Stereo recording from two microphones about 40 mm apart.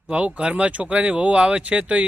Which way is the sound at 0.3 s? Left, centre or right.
Right.